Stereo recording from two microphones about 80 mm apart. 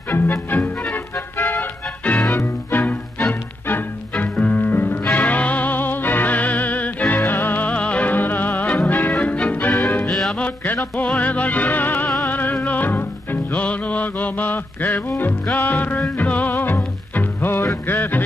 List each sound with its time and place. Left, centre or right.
0.1 s music: left
10.0 s music: centre
10.3 s music: centre